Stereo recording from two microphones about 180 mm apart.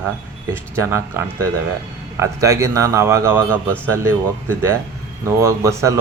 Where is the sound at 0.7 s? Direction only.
15° right (ahead or behind).